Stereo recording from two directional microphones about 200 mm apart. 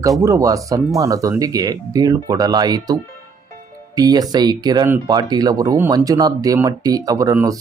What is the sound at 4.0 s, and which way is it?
Speech, 20° right (ahead or behind).